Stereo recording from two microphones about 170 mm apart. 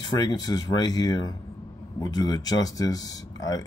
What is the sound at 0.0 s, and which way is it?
Speech, 25° left (ahead or behind).